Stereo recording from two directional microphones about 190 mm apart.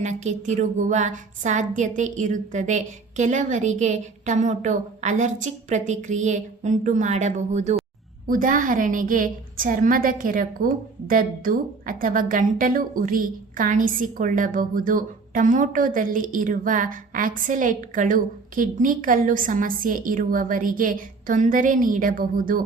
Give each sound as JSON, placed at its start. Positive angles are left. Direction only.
{"t": 0.0, "sound": "a woman's voice", "side_deg": -40}